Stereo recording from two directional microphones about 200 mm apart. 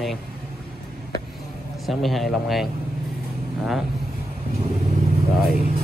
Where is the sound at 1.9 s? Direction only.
Centre (ahead or behind).